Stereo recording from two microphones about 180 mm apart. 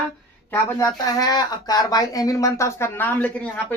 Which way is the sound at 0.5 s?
20° left (ahead or behind).